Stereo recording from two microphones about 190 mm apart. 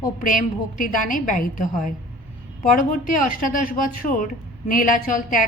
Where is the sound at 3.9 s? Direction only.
45° left (ahead or behind).